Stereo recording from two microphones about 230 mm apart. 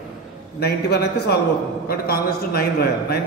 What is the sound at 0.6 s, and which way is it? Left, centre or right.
A man's voice, left.